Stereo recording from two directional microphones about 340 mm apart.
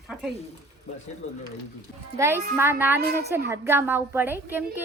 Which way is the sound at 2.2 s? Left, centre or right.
Centre.